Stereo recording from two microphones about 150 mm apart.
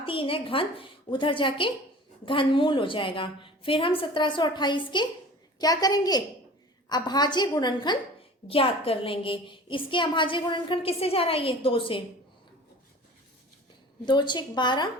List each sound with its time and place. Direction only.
0.0 s a woman's voice: 35° left (ahead or behind)
14.0 s a woman's voice: 30° left (ahead or behind)